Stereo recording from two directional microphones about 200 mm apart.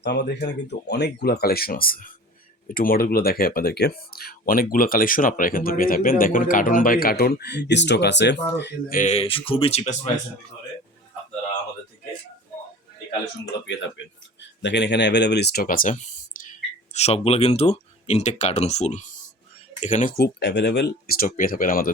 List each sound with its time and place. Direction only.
0.0 s speech: 60° left (ahead or behind)
9.0 s speech: 30° left (ahead or behind)
14.6 s speech: 60° left (ahead or behind)